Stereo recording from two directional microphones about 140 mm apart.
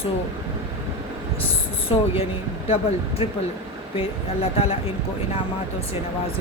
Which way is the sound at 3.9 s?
45° left (ahead or behind).